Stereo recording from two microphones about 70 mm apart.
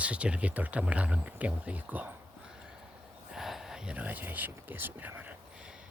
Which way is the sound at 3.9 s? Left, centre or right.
Right.